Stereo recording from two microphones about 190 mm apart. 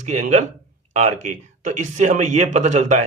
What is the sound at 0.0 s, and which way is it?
A man's voice, 40° right (ahead or behind).